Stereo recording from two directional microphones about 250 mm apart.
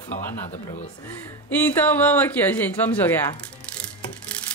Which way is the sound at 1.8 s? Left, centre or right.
Centre.